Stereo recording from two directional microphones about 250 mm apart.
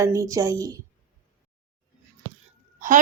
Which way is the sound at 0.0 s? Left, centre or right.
Centre.